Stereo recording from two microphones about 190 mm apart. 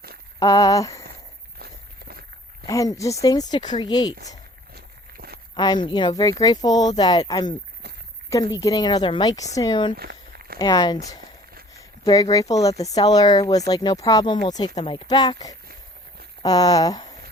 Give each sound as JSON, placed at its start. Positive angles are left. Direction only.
{"t": 0.3, "sound": "speech", "side_deg": 20}
{"t": 1.5, "sound": "walk", "side_deg": -55}
{"t": 2.6, "sound": "speech", "side_deg": 15}
{"t": 4.7, "sound": "walk", "side_deg": -55}
{"t": 5.5, "sound": "speech", "side_deg": 20}
{"t": 10.0, "sound": "walk", "side_deg": -55}
{"t": 10.6, "sound": "speech", "side_deg": 20}